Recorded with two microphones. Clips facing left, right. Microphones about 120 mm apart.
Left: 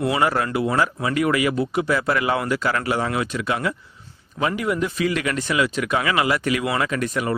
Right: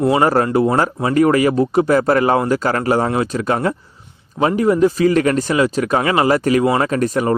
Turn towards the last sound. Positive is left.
turn(degrees=-40)  # may be behind; listen again after turning